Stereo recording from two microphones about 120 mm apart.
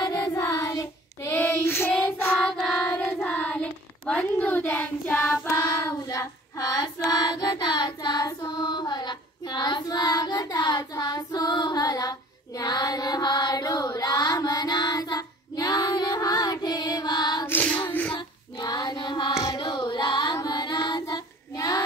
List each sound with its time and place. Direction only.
0.0 s child singing: 25° left (ahead or behind)
2.6 s child singing: 5° left (ahead or behind); by 17.5 s 35° left (ahead or behind)
17.5 s female singing: 15° left (ahead or behind)
18.1 s child singing: 35° left (ahead or behind)